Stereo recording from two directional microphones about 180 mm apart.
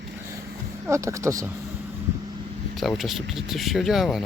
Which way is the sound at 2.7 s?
Centre (ahead or behind).